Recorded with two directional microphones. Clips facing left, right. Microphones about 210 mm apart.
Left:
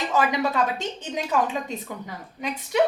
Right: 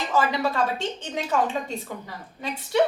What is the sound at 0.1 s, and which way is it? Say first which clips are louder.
Speech: even; 15° left (ahead or behind).